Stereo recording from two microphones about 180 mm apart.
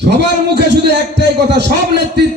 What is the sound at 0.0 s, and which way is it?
Speech, 70° right (ahead or behind).